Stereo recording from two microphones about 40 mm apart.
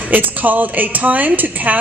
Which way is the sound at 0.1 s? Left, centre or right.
Right.